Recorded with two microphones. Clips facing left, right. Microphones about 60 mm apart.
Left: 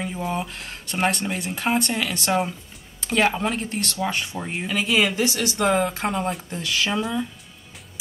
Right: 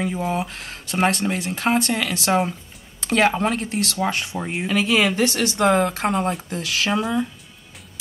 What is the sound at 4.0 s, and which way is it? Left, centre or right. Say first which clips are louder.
Speech: right 1 dB; centre.